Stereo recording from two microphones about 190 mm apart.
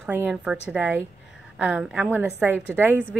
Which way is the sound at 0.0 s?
10° right (ahead or behind).